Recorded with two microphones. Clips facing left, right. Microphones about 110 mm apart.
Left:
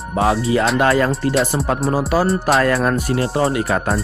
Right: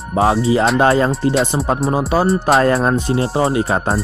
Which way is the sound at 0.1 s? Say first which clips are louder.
Right 2 dB; 30° right (ahead or behind).